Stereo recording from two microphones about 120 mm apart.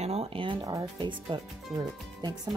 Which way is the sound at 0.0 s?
60° right (ahead or behind).